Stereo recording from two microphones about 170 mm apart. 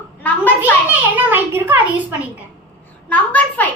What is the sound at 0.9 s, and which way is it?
Speech, 10° right (ahead or behind).